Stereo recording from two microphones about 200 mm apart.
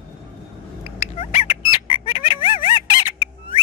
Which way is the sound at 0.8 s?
30° left (ahead or behind).